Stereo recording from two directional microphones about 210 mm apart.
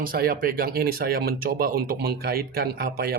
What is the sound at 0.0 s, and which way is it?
Speech, 45° right (ahead or behind).